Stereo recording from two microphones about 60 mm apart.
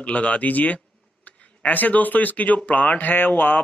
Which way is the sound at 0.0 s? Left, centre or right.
Left.